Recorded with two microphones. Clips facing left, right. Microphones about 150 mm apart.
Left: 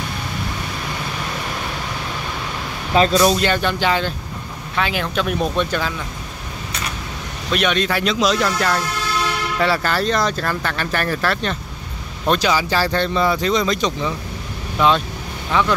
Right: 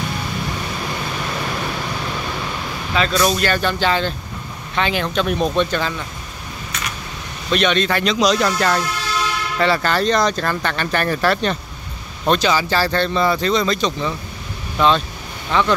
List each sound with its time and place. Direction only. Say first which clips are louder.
2.9 s speech: left 5 dB; 35° left (ahead or behind)
3.3 s speech: left 1 dB; 20° left (ahead or behind)
7.5 s speech: right 2 dB; 5° left (ahead or behind)